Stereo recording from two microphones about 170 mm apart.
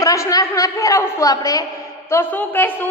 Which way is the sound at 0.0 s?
20° left (ahead or behind).